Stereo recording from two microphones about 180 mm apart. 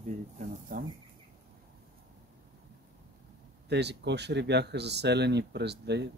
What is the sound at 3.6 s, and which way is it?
Speech, 70° right (ahead or behind).